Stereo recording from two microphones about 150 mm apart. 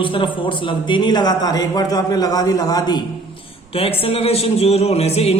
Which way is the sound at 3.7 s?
40° left (ahead or behind).